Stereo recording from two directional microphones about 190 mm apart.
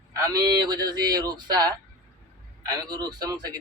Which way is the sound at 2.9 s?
20° right (ahead or behind).